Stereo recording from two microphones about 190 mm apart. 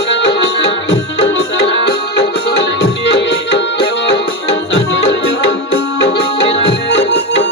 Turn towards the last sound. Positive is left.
turn(degrees=70)  # may be behind; listen again after turning